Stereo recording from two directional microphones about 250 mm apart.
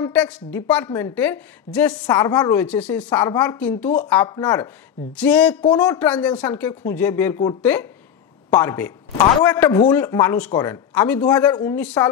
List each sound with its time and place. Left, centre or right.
0.0 s a man's voice: centre
5.1 s a man's voice: centre